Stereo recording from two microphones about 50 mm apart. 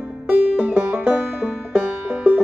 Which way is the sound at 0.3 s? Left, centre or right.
Right.